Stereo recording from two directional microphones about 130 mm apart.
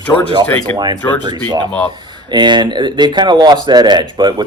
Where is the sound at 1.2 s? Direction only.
35° right (ahead or behind).